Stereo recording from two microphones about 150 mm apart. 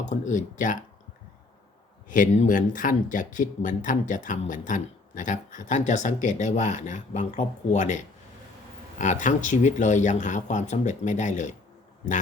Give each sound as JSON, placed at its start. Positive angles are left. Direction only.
{"t": 0.0, "sound": "speech", "side_deg": 55}
{"t": 2.0, "sound": "speech", "side_deg": 60}